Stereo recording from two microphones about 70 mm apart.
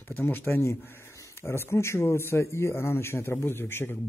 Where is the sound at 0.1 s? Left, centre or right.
Left.